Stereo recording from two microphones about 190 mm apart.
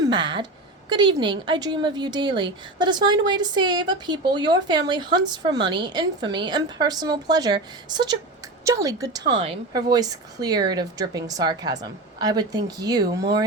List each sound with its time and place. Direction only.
0.0 s a woman's voice: 25° right (ahead or behind)